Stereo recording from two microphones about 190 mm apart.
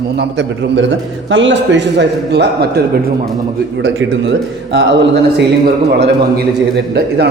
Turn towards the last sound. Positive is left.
turn(degrees=-60)  # may be behind; listen again after turning